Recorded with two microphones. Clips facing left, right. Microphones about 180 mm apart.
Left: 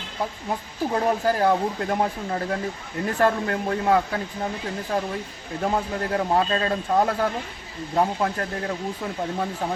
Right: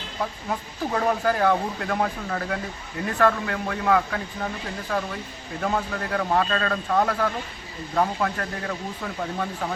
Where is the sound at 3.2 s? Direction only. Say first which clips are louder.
Even; 35° left (ahead or behind).